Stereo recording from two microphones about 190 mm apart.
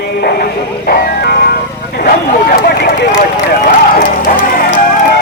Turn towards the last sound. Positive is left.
turn(degrees=45)  # may be behind; listen again after turning